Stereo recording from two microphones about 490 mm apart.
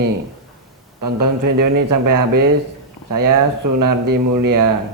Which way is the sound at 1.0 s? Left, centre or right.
Right.